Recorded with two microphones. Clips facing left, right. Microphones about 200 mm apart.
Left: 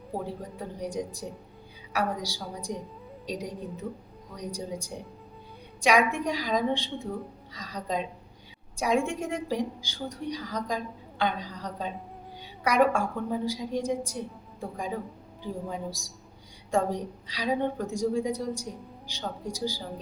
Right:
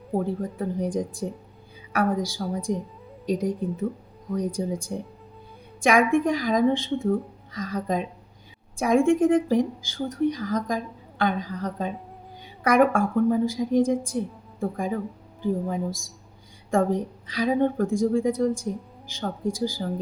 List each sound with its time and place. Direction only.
0.5 s a woman's voice: 50° right (ahead or behind)